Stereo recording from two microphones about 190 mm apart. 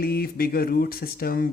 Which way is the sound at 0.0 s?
55° left (ahead or behind).